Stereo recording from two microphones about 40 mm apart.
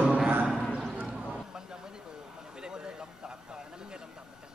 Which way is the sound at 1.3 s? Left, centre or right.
Centre.